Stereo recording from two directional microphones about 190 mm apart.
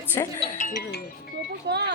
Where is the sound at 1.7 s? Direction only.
60° right (ahead or behind).